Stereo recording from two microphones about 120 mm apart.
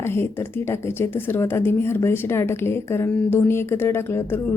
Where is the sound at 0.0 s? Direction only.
20° left (ahead or behind).